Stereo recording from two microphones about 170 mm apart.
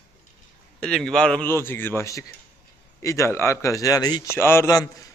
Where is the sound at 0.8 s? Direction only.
5° left (ahead or behind).